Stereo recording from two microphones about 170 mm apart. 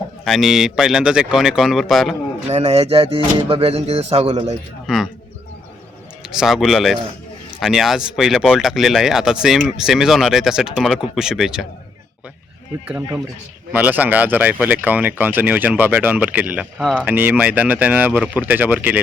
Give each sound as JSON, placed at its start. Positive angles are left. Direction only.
{"t": 0.3, "sound": "speech", "side_deg": 0}
{"t": 2.5, "sound": "speech", "side_deg": -35}
{"t": 6.2, "sound": "speech", "side_deg": -5}
{"t": 13.7, "sound": "speech", "side_deg": -10}